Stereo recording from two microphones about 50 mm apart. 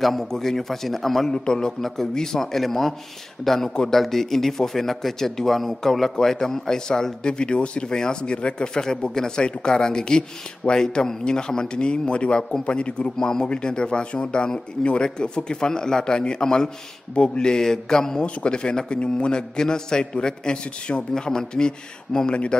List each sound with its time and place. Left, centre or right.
0.0 s a man's voice: centre